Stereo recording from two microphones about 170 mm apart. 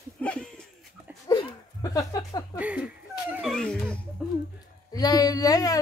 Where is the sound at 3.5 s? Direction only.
5° left (ahead or behind).